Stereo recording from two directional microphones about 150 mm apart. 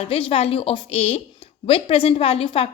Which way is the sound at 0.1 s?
40° left (ahead or behind).